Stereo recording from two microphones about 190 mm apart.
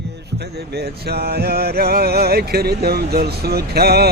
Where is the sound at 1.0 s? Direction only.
55° right (ahead or behind).